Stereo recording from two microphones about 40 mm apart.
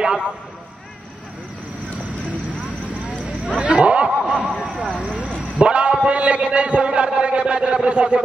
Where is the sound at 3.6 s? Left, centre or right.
Right.